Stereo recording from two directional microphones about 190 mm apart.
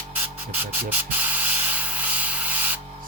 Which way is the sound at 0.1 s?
10° right (ahead or behind).